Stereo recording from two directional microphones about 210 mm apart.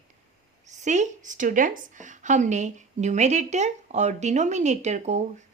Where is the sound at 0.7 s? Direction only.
35° right (ahead or behind).